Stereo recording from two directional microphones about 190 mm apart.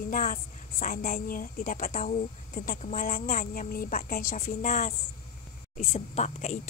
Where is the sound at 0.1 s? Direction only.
45° left (ahead or behind).